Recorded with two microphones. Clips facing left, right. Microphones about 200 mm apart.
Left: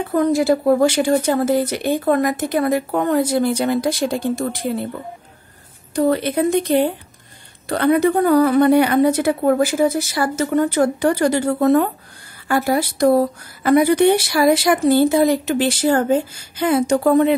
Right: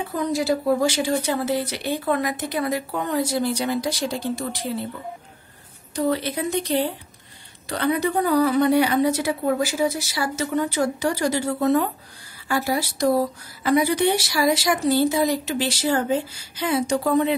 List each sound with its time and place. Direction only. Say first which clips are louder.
0.1 s speech: left 7 dB; 55° left (ahead or behind)
5.9 s speech: left 6 dB; 55° left (ahead or behind)